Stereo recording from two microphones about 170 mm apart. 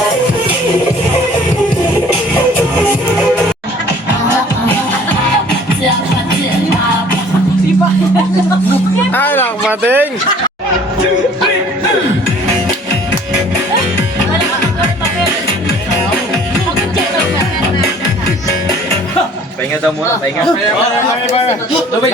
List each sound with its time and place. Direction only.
9.1 s music: 10° left (ahead or behind)
9.6 s a sound: 10° right (ahead or behind)
21.2 s a man's voice: 40° left (ahead or behind)